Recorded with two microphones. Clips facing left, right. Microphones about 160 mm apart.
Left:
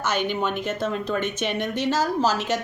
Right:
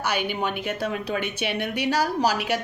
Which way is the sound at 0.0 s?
10° right (ahead or behind).